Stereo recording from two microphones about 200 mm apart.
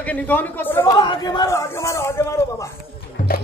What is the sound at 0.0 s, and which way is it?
Speech, 10° left (ahead or behind).